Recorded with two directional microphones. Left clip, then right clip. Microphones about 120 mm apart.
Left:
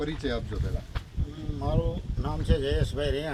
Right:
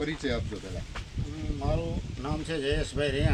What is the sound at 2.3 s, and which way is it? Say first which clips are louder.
Speech: left 1 dB; 30° left (ahead or behind).